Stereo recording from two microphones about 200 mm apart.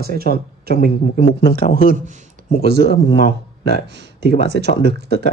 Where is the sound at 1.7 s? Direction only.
45° right (ahead or behind).